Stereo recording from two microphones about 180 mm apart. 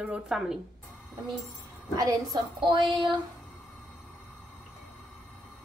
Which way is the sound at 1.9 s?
20° right (ahead or behind).